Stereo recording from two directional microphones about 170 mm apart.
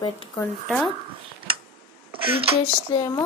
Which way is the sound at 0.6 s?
Centre (ahead or behind).